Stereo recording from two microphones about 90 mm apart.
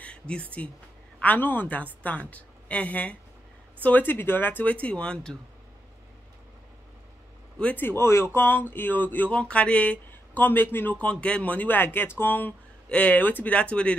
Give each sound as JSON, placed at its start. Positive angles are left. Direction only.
{"t": 0.0, "sound": "speech", "side_deg": 15}
{"t": 7.5, "sound": "speech", "side_deg": 20}